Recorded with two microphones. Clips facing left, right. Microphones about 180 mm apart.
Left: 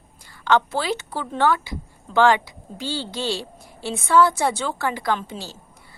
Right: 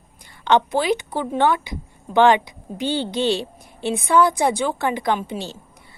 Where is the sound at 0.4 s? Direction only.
20° right (ahead or behind).